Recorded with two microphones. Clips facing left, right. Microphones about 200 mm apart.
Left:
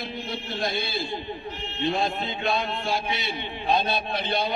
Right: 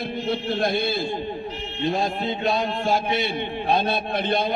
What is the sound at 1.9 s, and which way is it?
A man's voice, 40° right (ahead or behind).